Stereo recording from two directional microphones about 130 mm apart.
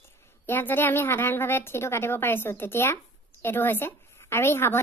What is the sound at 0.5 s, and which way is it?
A woman's voice, 15° left (ahead or behind).